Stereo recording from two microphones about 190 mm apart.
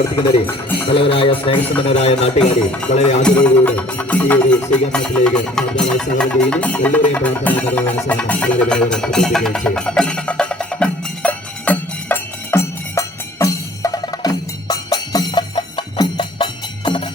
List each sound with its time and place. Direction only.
0.9 s a man's voice: 30° left (ahead or behind)
3.2 s music: 10° left (ahead or behind); by 17.0 s 25° left (ahead or behind)